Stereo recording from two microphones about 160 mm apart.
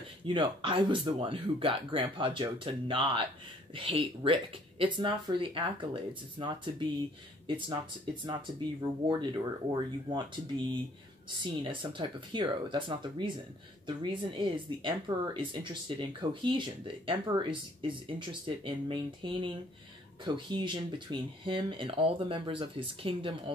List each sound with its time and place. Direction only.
0.3 s speech: 30° right (ahead or behind)